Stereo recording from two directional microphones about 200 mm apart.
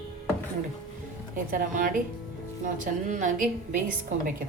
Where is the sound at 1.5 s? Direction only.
45° right (ahead or behind).